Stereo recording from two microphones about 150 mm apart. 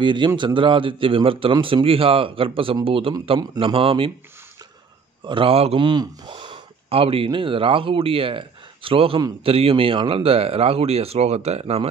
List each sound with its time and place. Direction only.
0.0 s a man's voice: 30° right (ahead or behind)
5.2 s a man's voice: 35° right (ahead or behind)